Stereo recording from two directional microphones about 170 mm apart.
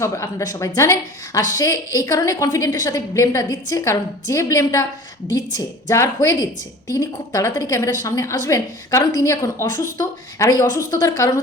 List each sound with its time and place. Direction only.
0.0 s a woman's voice: 15° left (ahead or behind)